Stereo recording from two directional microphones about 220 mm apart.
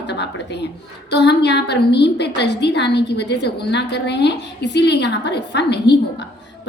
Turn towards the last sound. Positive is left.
turn(degrees=50)  # may be behind; listen again after turning